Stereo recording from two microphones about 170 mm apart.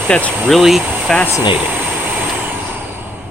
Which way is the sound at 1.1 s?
5° left (ahead or behind).